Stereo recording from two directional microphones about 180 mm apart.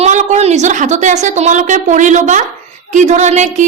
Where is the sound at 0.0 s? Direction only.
40° right (ahead or behind).